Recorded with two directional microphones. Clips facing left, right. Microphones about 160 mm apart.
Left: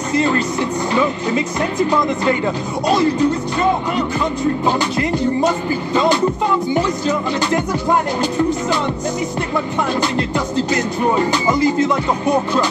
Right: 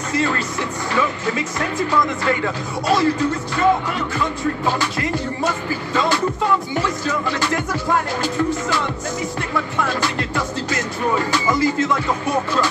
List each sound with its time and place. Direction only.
0.1 s speech: 20° left (ahead or behind)
0.9 s music: 25° left (ahead or behind)
6.7 s music: 20° left (ahead or behind)
9.8 s music: 20° left (ahead or behind)